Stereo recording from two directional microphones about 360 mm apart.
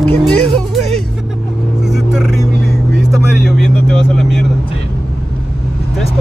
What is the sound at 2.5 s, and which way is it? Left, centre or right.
Vehicle, right.